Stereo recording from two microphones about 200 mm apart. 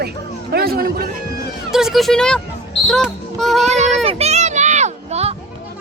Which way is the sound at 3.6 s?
35° right (ahead or behind).